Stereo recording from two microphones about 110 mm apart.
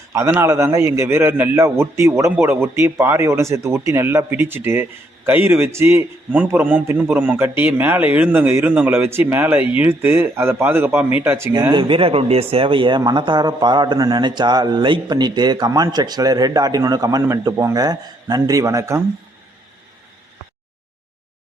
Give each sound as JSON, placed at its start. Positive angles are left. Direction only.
{"t": 0.1, "sound": "a man's voice", "side_deg": -25}
{"t": 6.3, "sound": "a man's voice", "side_deg": -15}
{"t": 11.7, "sound": "a man's voice", "side_deg": -50}